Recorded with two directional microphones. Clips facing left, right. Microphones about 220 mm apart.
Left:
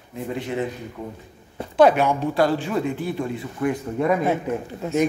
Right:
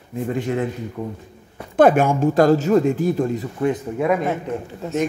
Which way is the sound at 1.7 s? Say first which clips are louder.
Right 2 dB; 50° right (ahead or behind).